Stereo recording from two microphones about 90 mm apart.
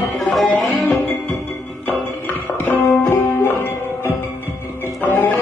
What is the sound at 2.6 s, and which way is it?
Music, 20° left (ahead or behind).